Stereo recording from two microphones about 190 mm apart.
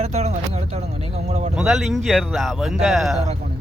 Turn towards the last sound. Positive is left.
turn(degrees=0)  # may be behind; listen again after turning